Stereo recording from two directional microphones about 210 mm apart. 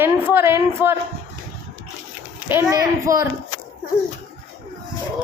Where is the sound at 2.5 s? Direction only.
15° right (ahead or behind).